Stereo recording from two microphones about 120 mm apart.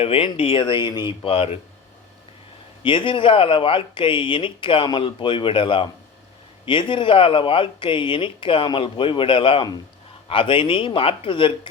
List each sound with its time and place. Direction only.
0.0 s speech: 50° left (ahead or behind)
2.8 s speech: 45° left (ahead or behind)